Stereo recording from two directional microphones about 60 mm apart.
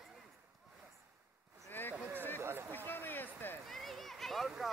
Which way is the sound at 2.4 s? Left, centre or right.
Right.